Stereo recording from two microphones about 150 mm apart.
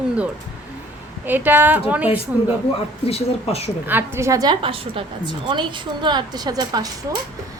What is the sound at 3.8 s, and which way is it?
A woman's voice, 15° right (ahead or behind).